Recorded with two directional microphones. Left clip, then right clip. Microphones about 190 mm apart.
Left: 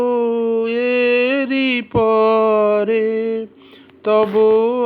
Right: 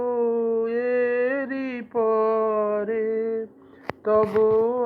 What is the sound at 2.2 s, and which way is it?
Mantra, 50° left (ahead or behind).